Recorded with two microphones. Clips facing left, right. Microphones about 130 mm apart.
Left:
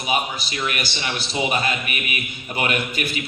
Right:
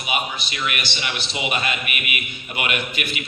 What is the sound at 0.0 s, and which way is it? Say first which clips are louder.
A man's voice: left 2 dB; 35° left (ahead or behind).